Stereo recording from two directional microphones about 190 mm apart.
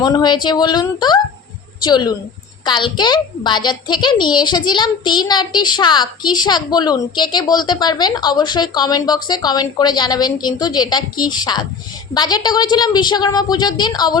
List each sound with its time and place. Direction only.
0.0 s a child's voice: 20° left (ahead or behind)